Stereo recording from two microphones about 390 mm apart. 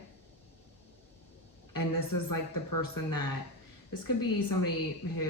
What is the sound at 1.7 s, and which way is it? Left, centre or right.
Speech, left.